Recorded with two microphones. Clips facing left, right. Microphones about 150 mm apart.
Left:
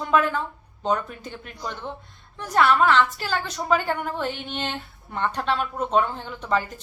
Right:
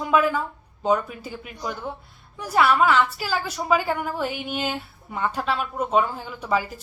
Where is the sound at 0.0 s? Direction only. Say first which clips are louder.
Right 1 dB; 5° right (ahead or behind).